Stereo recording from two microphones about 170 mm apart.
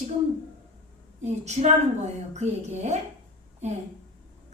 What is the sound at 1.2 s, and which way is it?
A woman's voice, 40° right (ahead or behind).